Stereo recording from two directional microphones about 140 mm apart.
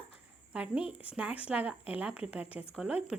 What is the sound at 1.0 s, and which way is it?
A woman's voice, 10° right (ahead or behind).